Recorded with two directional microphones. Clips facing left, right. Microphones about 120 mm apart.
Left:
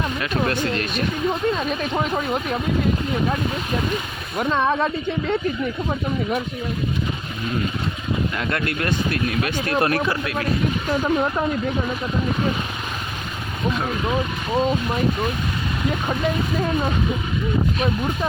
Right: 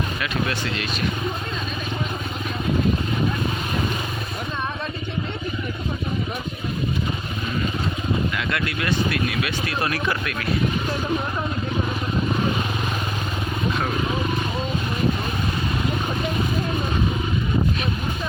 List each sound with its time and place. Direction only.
0.4 s speech: 50° left (ahead or behind)
2.1 s speech: 65° left (ahead or behind)
4.4 s speech: 90° left
8.4 s speech: 40° left (ahead or behind)